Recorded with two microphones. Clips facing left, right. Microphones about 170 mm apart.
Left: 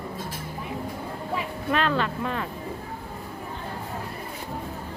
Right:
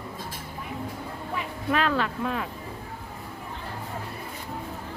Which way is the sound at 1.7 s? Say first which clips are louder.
Even; 5° right (ahead or behind).